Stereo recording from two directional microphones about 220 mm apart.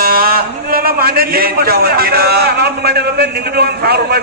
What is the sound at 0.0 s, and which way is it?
A man's voice, 45° right (ahead or behind).